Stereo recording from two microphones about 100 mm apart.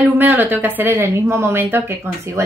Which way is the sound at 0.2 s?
20° right (ahead or behind).